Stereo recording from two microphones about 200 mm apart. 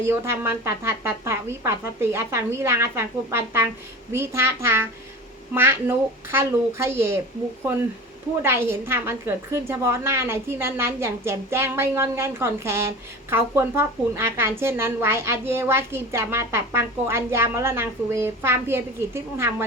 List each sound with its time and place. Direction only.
0.0 s a woman's voice: 10° right (ahead or behind)
8.4 s a woman's voice: 10° right (ahead or behind)